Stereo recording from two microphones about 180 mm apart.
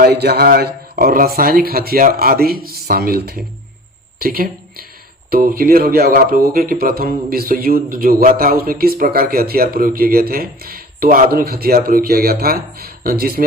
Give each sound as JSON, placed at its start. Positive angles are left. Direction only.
{"t": 0.0, "sound": "speech", "side_deg": -60}